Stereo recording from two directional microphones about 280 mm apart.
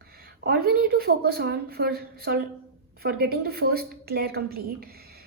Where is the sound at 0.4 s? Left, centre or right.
Right.